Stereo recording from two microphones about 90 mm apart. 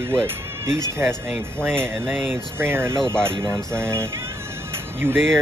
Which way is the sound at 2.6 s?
25° right (ahead or behind).